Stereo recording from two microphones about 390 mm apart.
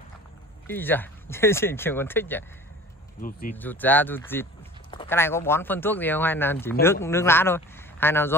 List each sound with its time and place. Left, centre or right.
0.7 s speech: centre
3.2 s speech: left
3.5 s speech: centre